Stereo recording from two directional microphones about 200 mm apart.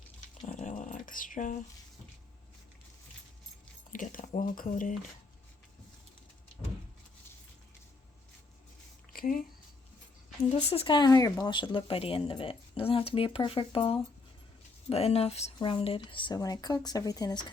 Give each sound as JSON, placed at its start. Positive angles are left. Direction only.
{"t": 0.4, "sound": "dog", "side_deg": 35}
{"t": 3.9, "sound": "speech", "side_deg": 40}
{"t": 9.1, "sound": "speech", "side_deg": 45}
{"t": 10.7, "sound": "speech", "side_deg": 25}